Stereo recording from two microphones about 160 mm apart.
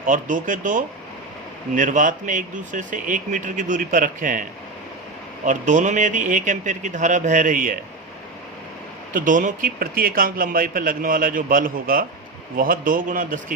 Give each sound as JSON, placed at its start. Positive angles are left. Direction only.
{"t": 0.0, "sound": "speech", "side_deg": -55}
{"t": 5.5, "sound": "speech", "side_deg": -50}
{"t": 9.1, "sound": "speech", "side_deg": -55}